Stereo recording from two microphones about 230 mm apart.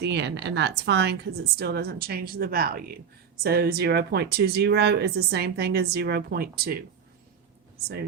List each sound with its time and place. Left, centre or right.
0.0 s speech: right